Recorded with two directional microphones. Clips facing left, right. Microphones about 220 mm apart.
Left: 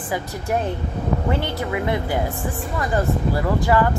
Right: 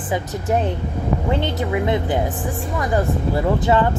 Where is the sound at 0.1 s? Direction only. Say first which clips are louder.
Right 3 dB; 20° right (ahead or behind).